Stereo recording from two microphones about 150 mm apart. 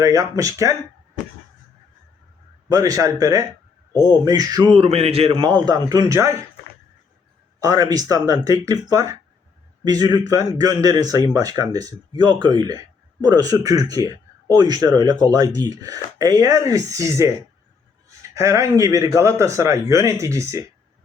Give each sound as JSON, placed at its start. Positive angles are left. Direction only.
{"t": 0.0, "sound": "speech", "side_deg": -20}
{"t": 2.6, "sound": "speech", "side_deg": -25}
{"t": 7.6, "sound": "speech", "side_deg": -25}